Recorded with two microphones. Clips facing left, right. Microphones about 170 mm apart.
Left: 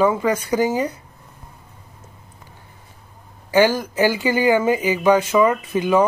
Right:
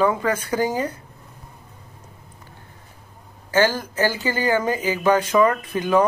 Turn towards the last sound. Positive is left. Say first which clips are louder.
# left 2 dB
turn(degrees=10)  # may be behind; listen again after turning